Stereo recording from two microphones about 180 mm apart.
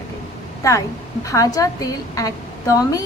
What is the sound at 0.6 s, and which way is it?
A woman's voice, 20° left (ahead or behind).